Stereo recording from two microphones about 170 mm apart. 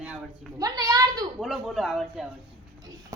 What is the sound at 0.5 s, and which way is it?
Speech, 20° right (ahead or behind).